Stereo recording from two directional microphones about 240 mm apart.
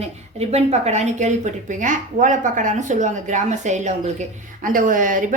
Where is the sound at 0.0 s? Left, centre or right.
Right.